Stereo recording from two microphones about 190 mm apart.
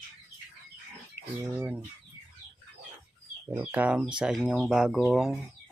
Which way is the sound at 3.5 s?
10° right (ahead or behind).